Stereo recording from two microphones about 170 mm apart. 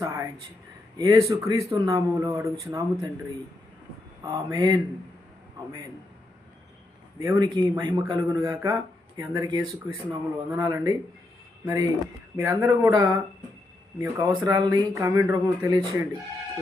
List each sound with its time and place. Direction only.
0.0 s a sound: 20° right (ahead or behind)
0.9 s a man's voice: 20° right (ahead or behind)
4.2 s a man's voice: 20° right (ahead or behind)
7.2 s a man's voice: 20° right (ahead or behind)